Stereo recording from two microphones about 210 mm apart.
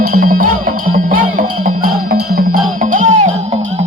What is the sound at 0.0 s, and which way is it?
Music, 45° right (ahead or behind).